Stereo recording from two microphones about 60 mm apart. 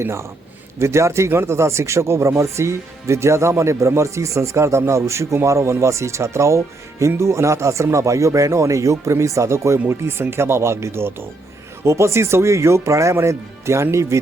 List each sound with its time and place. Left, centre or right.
0.0 s a man's voice: right
9.7 s a man's voice: right